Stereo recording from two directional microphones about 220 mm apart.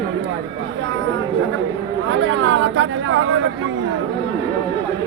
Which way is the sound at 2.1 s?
60° right (ahead or behind).